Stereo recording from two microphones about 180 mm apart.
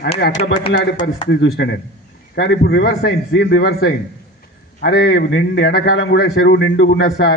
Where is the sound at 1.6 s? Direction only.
75° left (ahead or behind).